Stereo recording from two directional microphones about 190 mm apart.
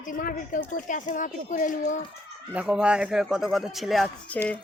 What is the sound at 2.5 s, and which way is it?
Speech, 5° right (ahead or behind).